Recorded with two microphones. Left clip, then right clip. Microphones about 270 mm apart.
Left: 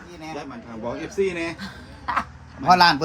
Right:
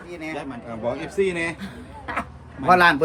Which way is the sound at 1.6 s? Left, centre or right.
Centre.